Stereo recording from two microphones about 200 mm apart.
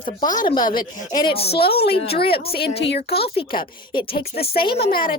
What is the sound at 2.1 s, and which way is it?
A woman's voice, 50° left (ahead or behind).